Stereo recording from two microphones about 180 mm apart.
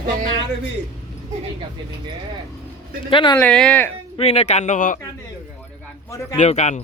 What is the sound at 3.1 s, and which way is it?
Speech, 25° left (ahead or behind).